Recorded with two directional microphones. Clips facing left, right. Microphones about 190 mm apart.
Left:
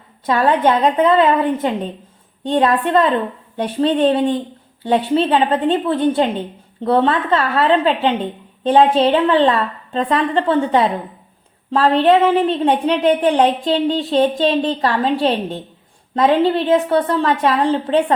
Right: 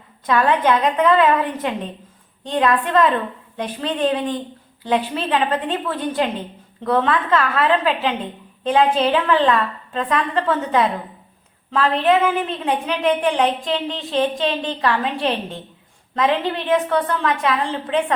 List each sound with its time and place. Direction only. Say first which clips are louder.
0.3 s a woman's voice: left 2 dB; 30° left (ahead or behind)